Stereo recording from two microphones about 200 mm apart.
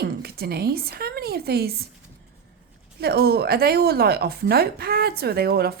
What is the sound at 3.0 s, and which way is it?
A woman's voice, 50° right (ahead or behind).